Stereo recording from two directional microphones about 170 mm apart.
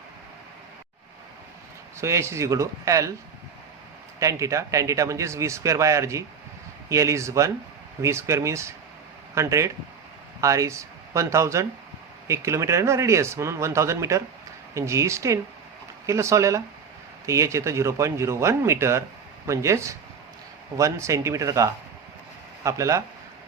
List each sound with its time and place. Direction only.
2.0 s speech: 15° right (ahead or behind)
4.2 s speech: 20° right (ahead or behind)